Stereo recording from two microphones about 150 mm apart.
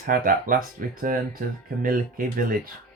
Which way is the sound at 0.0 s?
70° right (ahead or behind).